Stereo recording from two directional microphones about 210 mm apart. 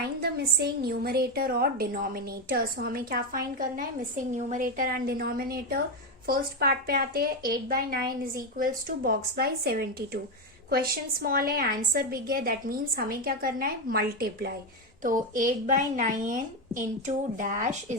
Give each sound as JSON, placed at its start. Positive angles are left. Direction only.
{"t": 0.2, "sound": "a woman's voice", "side_deg": -50}